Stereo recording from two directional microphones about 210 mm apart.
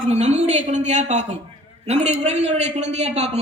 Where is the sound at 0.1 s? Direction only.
35° right (ahead or behind).